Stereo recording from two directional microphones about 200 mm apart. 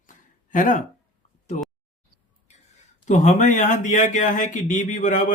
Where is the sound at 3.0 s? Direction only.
35° left (ahead or behind).